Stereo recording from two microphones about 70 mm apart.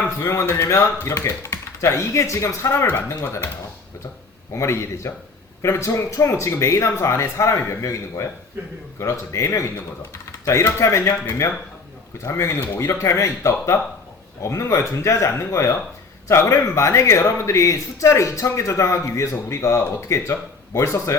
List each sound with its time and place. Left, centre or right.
0.2 s speech: left
4.5 s speech: left